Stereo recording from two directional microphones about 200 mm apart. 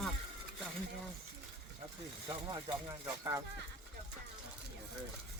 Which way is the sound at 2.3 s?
25° right (ahead or behind).